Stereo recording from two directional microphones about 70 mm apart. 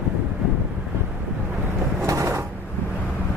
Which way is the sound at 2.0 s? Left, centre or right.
Right.